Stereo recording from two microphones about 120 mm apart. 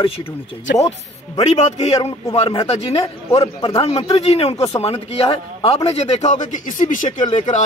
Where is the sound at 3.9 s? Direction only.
30° left (ahead or behind).